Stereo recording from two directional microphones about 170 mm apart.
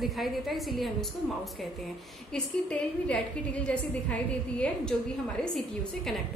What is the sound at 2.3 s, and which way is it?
A woman's voice, 5° left (ahead or behind).